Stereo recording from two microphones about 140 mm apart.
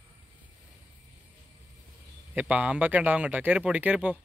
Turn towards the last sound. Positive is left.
turn(degrees=-10)  # may be behind; listen again after turning